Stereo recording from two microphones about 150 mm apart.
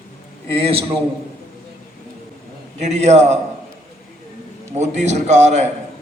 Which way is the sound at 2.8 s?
50° right (ahead or behind).